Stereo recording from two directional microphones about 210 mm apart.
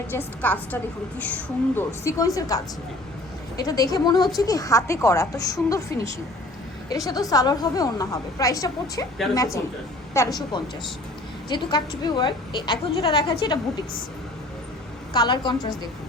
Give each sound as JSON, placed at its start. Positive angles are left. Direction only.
{"t": 0.1, "sound": "a woman's voice", "side_deg": 10}
{"t": 3.6, "sound": "a woman's voice", "side_deg": 15}
{"t": 11.4, "sound": "a woman's voice", "side_deg": 20}
{"t": 15.1, "sound": "a woman's voice", "side_deg": 20}